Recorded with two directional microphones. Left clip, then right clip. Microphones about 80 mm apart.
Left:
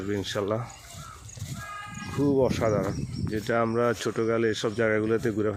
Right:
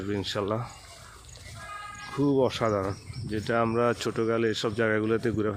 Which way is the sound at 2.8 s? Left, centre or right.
Centre.